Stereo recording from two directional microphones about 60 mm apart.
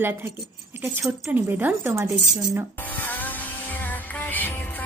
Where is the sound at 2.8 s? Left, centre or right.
Left.